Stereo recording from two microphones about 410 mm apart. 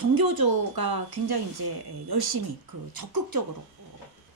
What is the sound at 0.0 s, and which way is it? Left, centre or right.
Speech, right.